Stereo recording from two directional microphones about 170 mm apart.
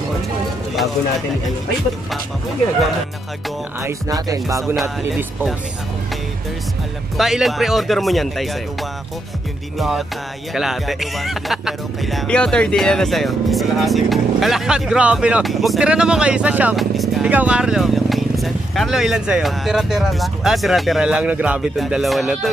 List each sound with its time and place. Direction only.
3.8 s speech: 20° right (ahead or behind)
7.2 s speech: centre (ahead or behind)
9.8 s speech: centre (ahead or behind)